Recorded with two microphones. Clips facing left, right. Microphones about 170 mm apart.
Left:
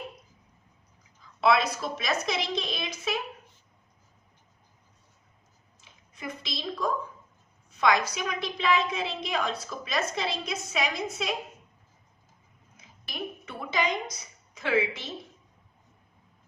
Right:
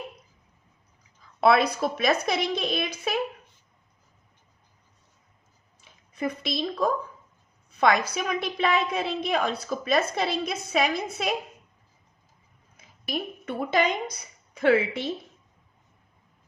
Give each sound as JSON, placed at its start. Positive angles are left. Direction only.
{"t": 1.4, "sound": "a woman's voice", "side_deg": -60}
{"t": 6.1, "sound": "a woman's voice", "side_deg": -60}
{"t": 12.7, "sound": "a sound", "side_deg": -55}
{"t": 14.5, "sound": "a woman's voice", "side_deg": -60}